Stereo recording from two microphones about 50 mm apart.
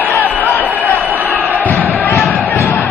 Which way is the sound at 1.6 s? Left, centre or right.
Left.